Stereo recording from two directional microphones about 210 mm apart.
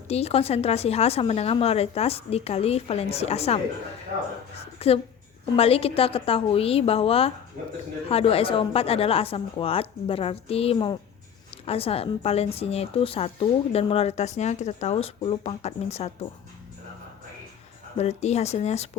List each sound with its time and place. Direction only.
0.1 s a woman's voice: 30° left (ahead or behind)
4.8 s a woman's voice: 30° left (ahead or behind)
17.9 s speech: 30° left (ahead or behind)